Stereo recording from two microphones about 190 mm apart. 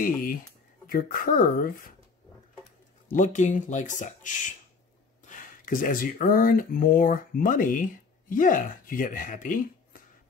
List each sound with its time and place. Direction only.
0.0 s speech: 45° left (ahead or behind)
3.1 s speech: 40° left (ahead or behind)